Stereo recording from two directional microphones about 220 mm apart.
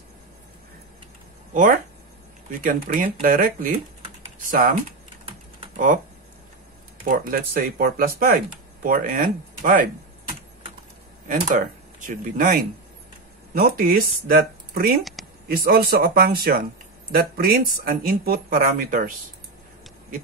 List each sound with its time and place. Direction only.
1.5 s speech: 35° right (ahead or behind)
7.1 s speech: 40° right (ahead or behind)
11.2 s speech: 40° right (ahead or behind)